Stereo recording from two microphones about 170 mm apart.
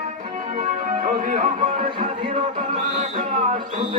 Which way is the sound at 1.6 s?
30° right (ahead or behind).